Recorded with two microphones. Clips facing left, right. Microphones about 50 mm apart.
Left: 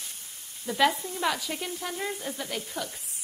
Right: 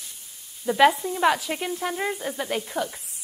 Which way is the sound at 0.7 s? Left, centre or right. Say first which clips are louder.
Right 6 dB; right.